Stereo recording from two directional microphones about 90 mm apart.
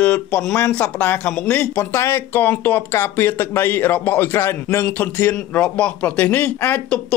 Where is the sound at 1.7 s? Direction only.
30° left (ahead or behind).